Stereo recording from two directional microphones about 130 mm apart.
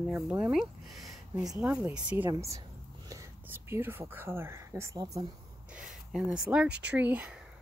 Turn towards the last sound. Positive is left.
turn(degrees=-10)  # may be behind; listen again after turning